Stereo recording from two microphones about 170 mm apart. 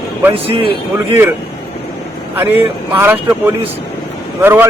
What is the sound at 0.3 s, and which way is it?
Speech, 35° right (ahead or behind).